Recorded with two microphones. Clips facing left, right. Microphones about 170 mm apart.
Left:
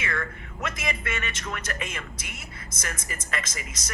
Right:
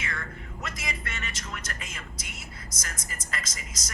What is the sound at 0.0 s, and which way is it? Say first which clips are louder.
A woman's voice: left 5 dB; 60° left (ahead or behind).